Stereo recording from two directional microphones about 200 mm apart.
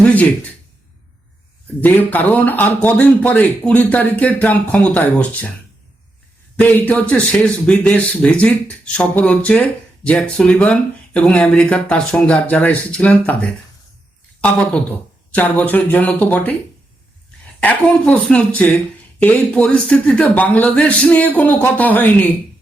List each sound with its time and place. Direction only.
1.6 s a man's voice: 10° left (ahead or behind)
6.6 s a man's voice: 10° left (ahead or behind)
14.4 s a man's voice: 5° left (ahead or behind)
17.6 s a man's voice: 5° left (ahead or behind)